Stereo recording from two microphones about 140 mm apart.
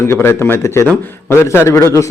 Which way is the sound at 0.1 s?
15° left (ahead or behind).